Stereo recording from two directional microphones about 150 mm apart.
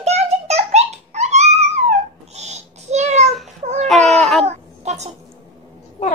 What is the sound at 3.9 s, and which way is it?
Baby cry, centre (ahead or behind).